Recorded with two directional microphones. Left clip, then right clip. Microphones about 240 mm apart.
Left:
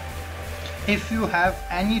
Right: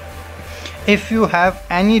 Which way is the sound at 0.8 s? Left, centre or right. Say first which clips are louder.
Right 9 dB; right.